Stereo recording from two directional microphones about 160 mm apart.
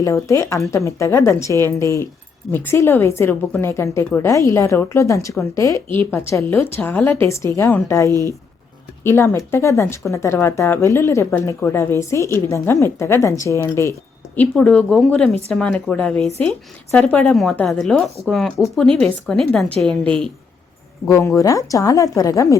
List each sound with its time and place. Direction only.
0.0 s a woman's voice: 20° left (ahead or behind)
14.3 s a woman's voice: 5° left (ahead or behind)
21.1 s speech: 20° left (ahead or behind)